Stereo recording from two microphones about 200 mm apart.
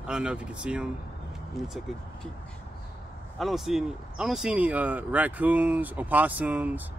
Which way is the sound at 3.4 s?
Centre (ahead or behind).